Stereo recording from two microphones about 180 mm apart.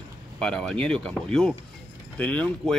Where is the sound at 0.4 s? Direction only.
5° left (ahead or behind).